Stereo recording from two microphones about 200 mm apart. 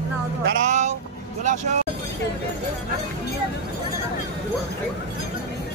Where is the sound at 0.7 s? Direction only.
35° right (ahead or behind).